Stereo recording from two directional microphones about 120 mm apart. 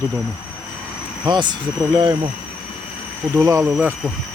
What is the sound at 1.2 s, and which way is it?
Speech, 40° right (ahead or behind).